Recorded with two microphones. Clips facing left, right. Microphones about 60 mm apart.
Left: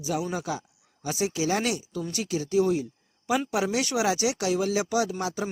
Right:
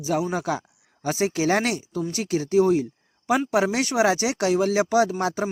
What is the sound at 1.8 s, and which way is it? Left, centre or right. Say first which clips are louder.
A man's voice: right 4 dB; right.